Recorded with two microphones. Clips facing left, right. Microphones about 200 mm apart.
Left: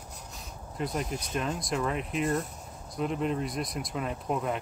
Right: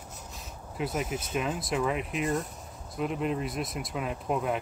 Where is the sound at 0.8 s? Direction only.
5° right (ahead or behind).